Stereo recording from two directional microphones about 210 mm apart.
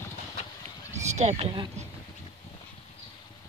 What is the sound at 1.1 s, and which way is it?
Speech, 30° right (ahead or behind).